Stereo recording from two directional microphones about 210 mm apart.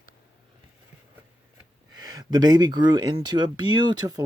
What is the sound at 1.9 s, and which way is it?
Speech, 20° right (ahead or behind).